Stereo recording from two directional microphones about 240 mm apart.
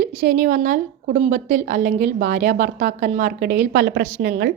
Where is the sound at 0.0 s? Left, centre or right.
Right.